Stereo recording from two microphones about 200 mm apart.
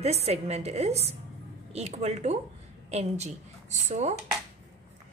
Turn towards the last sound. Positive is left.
turn(degrees=-35)  # may be behind; listen again after turning